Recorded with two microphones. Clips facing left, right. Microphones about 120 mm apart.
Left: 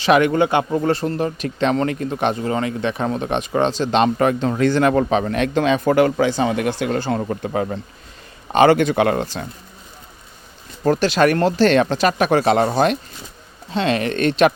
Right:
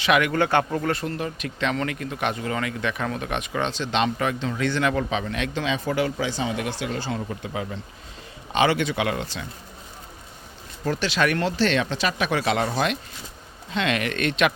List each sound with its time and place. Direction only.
0.0 s speech: 30° left (ahead or behind)
0.3 s speech: 15° left (ahead or behind)
0.9 s speech: 35° left (ahead or behind)
10.8 s speech: 45° left (ahead or behind)